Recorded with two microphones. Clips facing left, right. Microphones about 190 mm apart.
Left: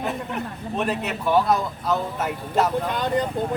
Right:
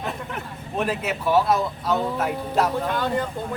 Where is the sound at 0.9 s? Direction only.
Centre (ahead or behind).